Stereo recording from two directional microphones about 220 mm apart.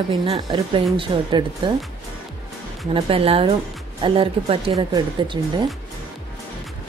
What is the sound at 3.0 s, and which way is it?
Speech, 25° right (ahead or behind).